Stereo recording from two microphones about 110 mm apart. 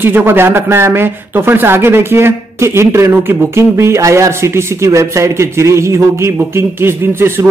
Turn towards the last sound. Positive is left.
turn(degrees=-20)  # may be behind; listen again after turning